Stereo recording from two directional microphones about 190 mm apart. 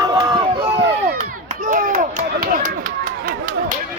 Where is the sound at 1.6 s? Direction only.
40° right (ahead or behind).